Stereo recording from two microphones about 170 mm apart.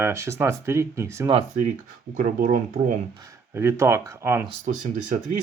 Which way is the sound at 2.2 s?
55° right (ahead or behind).